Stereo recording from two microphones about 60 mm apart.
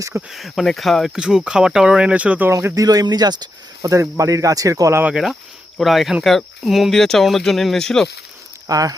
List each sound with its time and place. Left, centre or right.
0.3 s speech: centre
1.1 s speech: centre
2.5 s speech: right
2.7 s speech: right
4.2 s speech: right
5.1 s speech: centre
8.6 s speech: right